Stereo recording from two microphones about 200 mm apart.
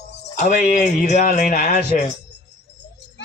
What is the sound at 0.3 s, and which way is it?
Speech, 40° left (ahead or behind).